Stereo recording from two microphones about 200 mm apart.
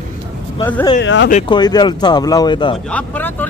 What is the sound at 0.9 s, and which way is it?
Speech, 65° left (ahead or behind).